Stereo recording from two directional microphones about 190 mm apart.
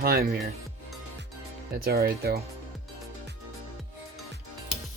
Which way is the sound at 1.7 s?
55° right (ahead or behind).